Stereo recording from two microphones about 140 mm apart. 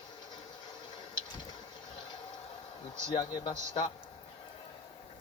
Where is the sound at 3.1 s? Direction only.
30° left (ahead or behind).